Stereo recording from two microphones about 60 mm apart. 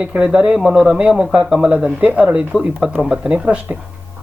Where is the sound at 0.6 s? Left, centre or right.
Centre.